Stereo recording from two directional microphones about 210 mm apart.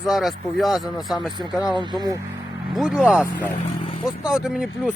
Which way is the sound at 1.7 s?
20° right (ahead or behind).